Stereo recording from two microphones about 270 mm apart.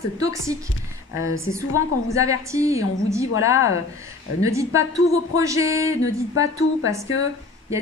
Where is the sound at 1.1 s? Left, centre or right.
Left.